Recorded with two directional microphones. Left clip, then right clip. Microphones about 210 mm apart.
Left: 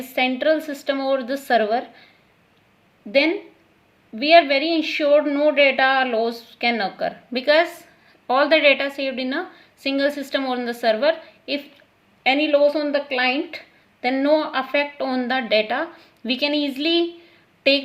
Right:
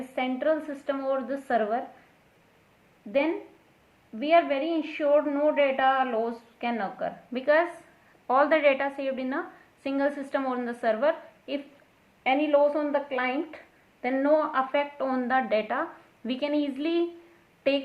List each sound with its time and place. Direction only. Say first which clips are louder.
0.2 s a woman's voice: left 7 dB; 40° left (ahead or behind)
4.2 s a woman's voice: left 8 dB; 40° left (ahead or behind)